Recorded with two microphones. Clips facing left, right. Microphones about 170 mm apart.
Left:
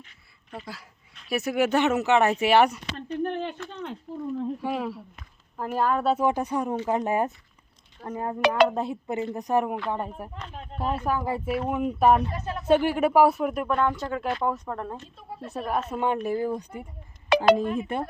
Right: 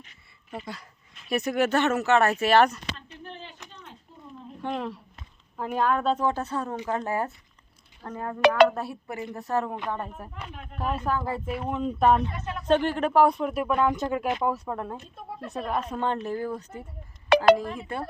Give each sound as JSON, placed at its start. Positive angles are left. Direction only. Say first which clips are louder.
{"t": 0.5, "sound": "speech", "louder": "right 2 dB", "side_deg": 0}
{"t": 3.2, "sound": "a sound", "louder": "left 12 dB", "side_deg": 60}
{"t": 4.6, "sound": "a woman's voice", "louder": "left 2 dB", "side_deg": 5}
{"t": 8.4, "sound": "speech", "louder": "right 3 dB", "side_deg": -60}
{"t": 8.7, "sound": "a woman's voice", "louder": "left 5 dB", "side_deg": 20}
{"t": 13.7, "sound": "speech", "louder": "right 1 dB", "side_deg": -15}
{"t": 15.1, "sound": "speech", "louder": "even", "side_deg": -70}
{"t": 15.9, "sound": "speech", "louder": "left 2 dB", "side_deg": 10}
{"t": 17.2, "sound": "a sound", "louder": "right 1 dB", "side_deg": -60}
{"t": 17.6, "sound": "a woman's voice", "louder": "left 5 dB", "side_deg": 20}